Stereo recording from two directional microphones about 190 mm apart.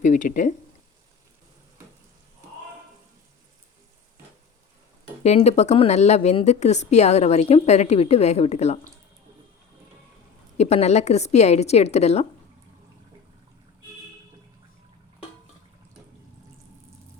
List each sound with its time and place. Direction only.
0.0 s speech: 40° left (ahead or behind)
5.2 s speech: 35° left (ahead or behind)
10.6 s speech: 35° left (ahead or behind)